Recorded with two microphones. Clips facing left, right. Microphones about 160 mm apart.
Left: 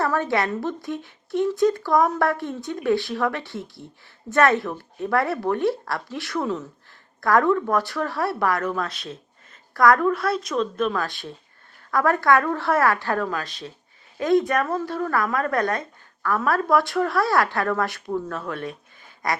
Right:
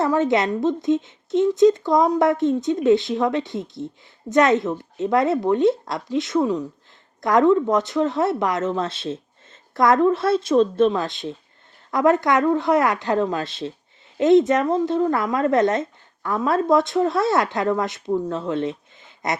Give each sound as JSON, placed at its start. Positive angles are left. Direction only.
{"t": 0.0, "sound": "speech", "side_deg": -20}